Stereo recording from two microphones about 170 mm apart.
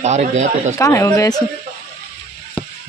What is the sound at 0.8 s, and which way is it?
Speech, 20° left (ahead or behind).